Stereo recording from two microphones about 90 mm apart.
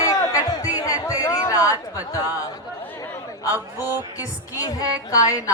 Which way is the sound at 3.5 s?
20° right (ahead or behind).